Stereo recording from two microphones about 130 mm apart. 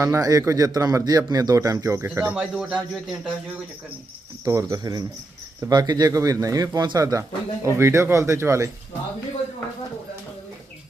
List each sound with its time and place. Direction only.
0.0 s a man's voice: 25° right (ahead or behind); by 3.3 s 5° right (ahead or behind)
4.4 s a man's voice: 30° right (ahead or behind)